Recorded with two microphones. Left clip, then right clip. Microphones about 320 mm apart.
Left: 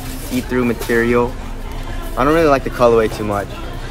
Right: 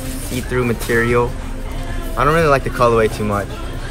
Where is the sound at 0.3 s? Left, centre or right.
Right.